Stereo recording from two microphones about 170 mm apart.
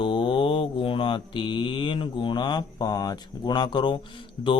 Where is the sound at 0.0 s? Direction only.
30° left (ahead or behind).